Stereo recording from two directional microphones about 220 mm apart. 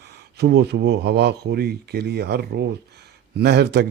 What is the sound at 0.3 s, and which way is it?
Speech, 50° right (ahead or behind).